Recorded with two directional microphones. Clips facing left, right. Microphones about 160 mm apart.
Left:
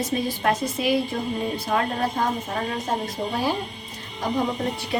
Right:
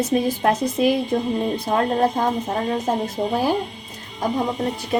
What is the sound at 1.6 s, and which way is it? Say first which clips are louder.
Speech: right 5 dB; 35° right (ahead or behind).